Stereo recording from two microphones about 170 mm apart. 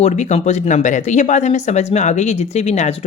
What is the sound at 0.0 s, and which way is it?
Speech, 45° left (ahead or behind).